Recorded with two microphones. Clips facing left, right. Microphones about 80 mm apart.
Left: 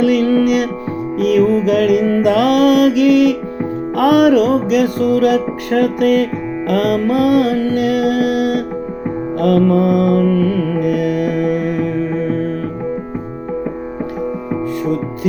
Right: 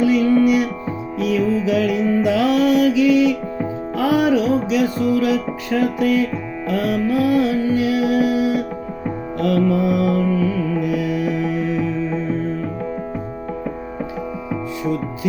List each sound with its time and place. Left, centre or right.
0.0 s music: left
9.4 s music: left